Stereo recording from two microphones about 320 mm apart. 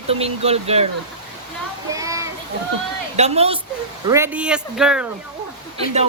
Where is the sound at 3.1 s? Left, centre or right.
Centre.